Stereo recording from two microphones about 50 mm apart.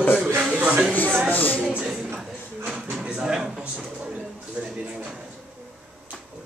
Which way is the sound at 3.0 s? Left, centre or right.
Centre.